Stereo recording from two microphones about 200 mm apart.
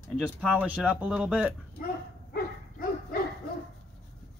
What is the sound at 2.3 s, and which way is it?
Dog, 45° left (ahead or behind).